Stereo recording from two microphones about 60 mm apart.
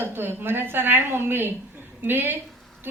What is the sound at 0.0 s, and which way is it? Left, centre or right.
A woman's voice, right.